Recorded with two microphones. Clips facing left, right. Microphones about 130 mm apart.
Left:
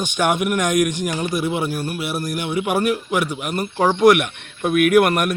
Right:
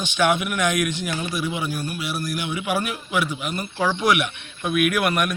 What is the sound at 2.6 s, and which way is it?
Speech, 55° left (ahead or behind).